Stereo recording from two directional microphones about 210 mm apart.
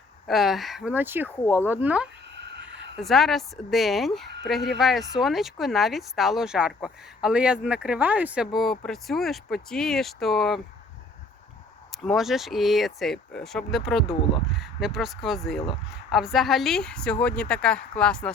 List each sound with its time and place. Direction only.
0.3 s speech: centre (ahead or behind)
1.4 s speech: 15° left (ahead or behind)
1.6 s speech: 10° right (ahead or behind)
2.3 s a sound: 55° right (ahead or behind)
3.0 s speech: centre (ahead or behind)
12.0 s speech: centre (ahead or behind)